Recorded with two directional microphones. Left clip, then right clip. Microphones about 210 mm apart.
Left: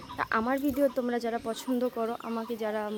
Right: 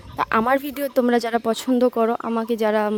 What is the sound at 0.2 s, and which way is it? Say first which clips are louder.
Speech: right 9 dB; 40° right (ahead or behind).